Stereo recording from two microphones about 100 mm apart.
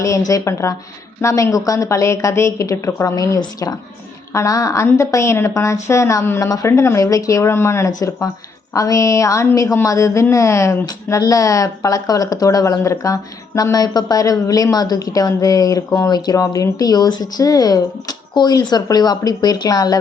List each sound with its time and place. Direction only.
0.0 s speech: 35° left (ahead or behind)